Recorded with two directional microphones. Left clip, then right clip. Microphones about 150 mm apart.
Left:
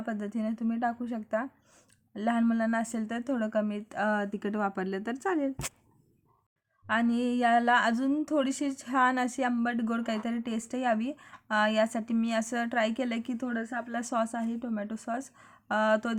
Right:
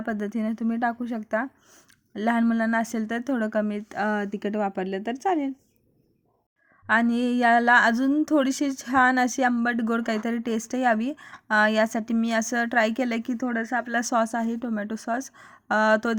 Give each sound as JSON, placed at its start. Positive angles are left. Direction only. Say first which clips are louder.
{"t": 0.0, "sound": "a woman's voice", "louder": "right 5 dB", "side_deg": -30}
{"t": 6.8, "sound": "a woman's voice", "louder": "right 6 dB", "side_deg": -35}